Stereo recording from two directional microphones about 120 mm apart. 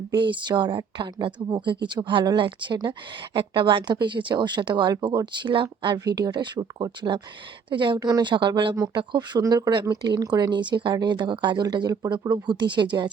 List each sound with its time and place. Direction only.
0.1 s speech: 40° right (ahead or behind)
8.7 s speech: 30° right (ahead or behind)